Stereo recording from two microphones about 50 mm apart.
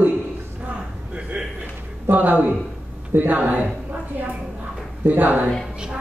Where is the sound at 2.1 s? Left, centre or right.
Right.